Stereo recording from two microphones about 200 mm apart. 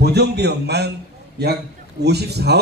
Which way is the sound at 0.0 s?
55° right (ahead or behind).